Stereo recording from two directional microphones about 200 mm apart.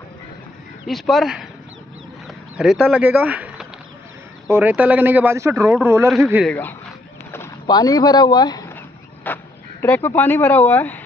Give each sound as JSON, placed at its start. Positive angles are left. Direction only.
{"t": 0.8, "sound": "speech", "side_deg": 0}
{"t": 2.2, "sound": "a sound", "side_deg": -5}
{"t": 4.5, "sound": "speech", "side_deg": -10}
{"t": 7.3, "sound": "speech", "side_deg": 15}